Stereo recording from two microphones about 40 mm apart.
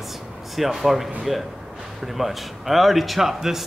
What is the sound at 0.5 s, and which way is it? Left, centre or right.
Speech, centre.